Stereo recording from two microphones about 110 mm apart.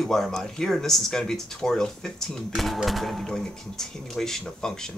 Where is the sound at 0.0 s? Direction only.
Centre (ahead or behind).